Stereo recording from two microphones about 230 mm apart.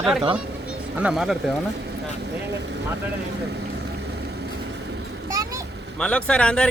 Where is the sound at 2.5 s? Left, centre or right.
Right.